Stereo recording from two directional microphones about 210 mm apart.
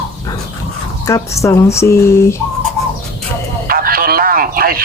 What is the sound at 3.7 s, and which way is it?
Radio, 45° right (ahead or behind).